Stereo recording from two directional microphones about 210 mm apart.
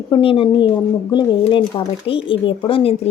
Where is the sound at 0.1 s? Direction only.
25° left (ahead or behind).